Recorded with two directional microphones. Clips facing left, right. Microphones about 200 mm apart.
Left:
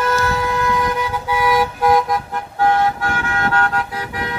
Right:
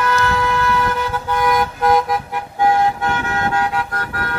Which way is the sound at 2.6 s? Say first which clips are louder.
Right 1 dB; 15° right (ahead or behind).